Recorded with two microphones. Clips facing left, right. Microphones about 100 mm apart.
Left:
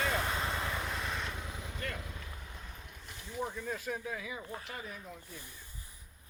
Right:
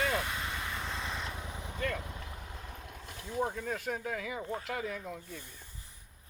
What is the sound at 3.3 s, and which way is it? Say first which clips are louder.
Speech: right 4 dB; 55° right (ahead or behind).